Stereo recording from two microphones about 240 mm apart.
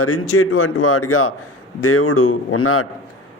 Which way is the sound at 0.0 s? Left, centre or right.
Left.